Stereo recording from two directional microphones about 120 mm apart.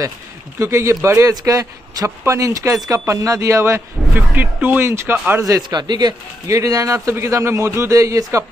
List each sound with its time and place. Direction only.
0.6 s speech: 20° right (ahead or behind)
5.4 s a man's voice: 35° right (ahead or behind)